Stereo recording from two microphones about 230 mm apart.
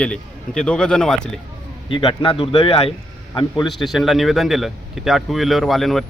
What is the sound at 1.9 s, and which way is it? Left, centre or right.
Speech, left.